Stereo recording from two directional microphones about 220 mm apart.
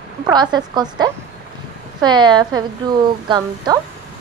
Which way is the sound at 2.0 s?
20° right (ahead or behind).